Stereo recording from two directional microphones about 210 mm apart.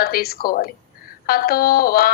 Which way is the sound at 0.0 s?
45° left (ahead or behind).